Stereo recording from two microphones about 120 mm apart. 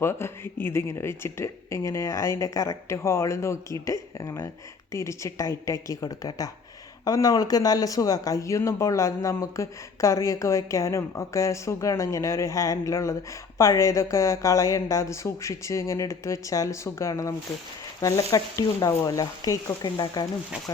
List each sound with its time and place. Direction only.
0.0 s speech: 20° left (ahead or behind)